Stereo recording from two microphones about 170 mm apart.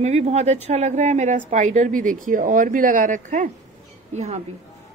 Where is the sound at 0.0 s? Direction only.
40° right (ahead or behind).